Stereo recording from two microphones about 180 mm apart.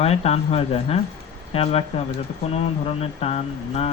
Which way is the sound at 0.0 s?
35° left (ahead or behind).